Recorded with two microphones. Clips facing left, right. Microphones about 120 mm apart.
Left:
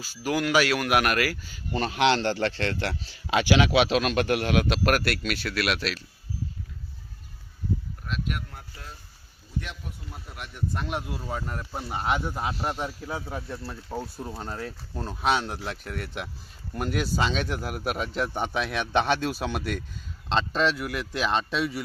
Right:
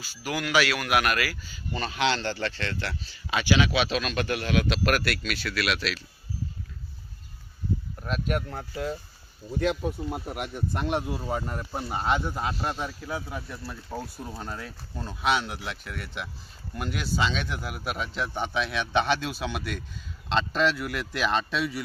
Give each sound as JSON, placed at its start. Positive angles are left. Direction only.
{"t": 0.0, "sound": "speech", "side_deg": 40}
{"t": 8.0, "sound": "speech", "side_deg": -45}
{"t": 8.5, "sound": "speech", "side_deg": -90}
{"t": 10.8, "sound": "speech", "side_deg": 0}
{"t": 13.9, "sound": "speech", "side_deg": 5}
{"t": 14.3, "sound": "speech", "side_deg": 25}
{"t": 14.9, "sound": "a man's voice", "side_deg": 40}
{"t": 20.3, "sound": "speech", "side_deg": 25}